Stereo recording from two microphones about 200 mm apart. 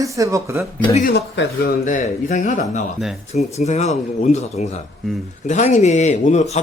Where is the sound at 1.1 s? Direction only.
55° left (ahead or behind).